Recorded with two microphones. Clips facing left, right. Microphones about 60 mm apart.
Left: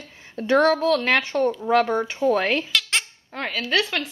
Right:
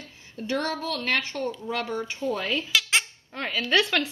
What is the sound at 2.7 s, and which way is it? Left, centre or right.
Bleat, centre.